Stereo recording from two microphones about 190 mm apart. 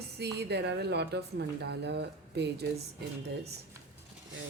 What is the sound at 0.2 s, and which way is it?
Speech, 60° right (ahead or behind).